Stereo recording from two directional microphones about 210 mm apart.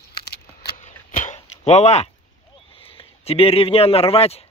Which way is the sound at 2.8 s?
25° left (ahead or behind).